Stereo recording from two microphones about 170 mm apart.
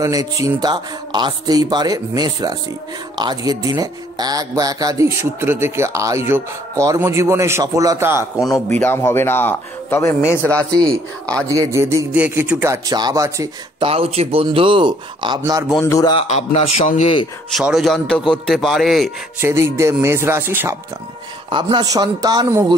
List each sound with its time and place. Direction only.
0.0 s speech: 20° right (ahead or behind)
8.6 s speech: 10° left (ahead or behind)
11.4 s speech: 20° right (ahead or behind)
13.8 s speech: 35° right (ahead or behind)
15.8 s a man's voice: 20° left (ahead or behind)
16.2 s a man's voice: 40° left (ahead or behind)
17.5 s a man's voice: centre (ahead or behind)
19.4 s speech: 15° right (ahead or behind)
21.5 s speech: 30° right (ahead or behind)